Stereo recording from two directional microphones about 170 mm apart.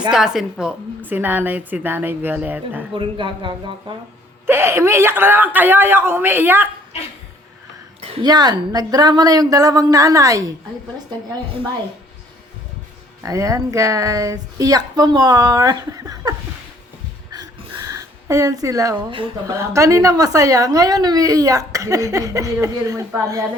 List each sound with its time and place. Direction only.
0.1 s a woman's voice: 5° right (ahead or behind)
2.9 s a woman's voice: 30° right (ahead or behind)
4.4 s a woman's voice: 15° right (ahead or behind)
8.2 s a woman's voice: 25° right (ahead or behind)
13.2 s a woman's voice: 20° right (ahead or behind)
17.8 s speech: 20° right (ahead or behind)
19.5 s a woman's voice: 20° right (ahead or behind)